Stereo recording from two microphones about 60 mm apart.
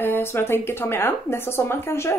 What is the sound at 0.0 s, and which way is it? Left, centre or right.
A woman's voice, left.